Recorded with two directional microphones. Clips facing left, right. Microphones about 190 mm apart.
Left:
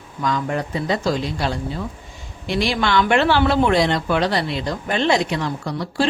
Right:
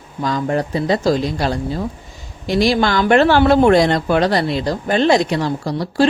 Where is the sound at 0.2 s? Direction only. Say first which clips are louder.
Right 4 dB; 35° right (ahead or behind).